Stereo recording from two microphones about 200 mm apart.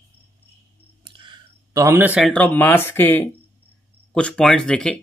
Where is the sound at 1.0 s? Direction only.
25° right (ahead or behind); by 2.3 s 5° right (ahead or behind).